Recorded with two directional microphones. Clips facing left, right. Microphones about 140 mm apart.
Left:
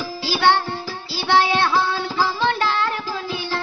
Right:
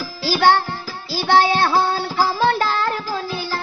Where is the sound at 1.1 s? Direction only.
40° right (ahead or behind).